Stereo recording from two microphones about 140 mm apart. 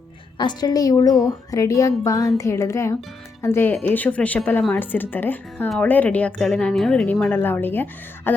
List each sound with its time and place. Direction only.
0.3 s a woman's voice: 30° left (ahead or behind); by 5.6 s 15° left (ahead or behind)
5.6 s speech: centre (ahead or behind)
5.9 s a woman's voice: 10° left (ahead or behind)